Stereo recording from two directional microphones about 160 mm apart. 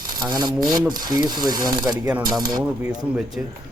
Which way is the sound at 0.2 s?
25° right (ahead or behind).